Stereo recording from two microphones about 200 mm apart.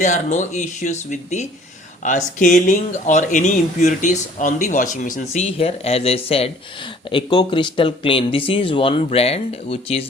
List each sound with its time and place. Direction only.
0.0 s speech: 35° left (ahead or behind)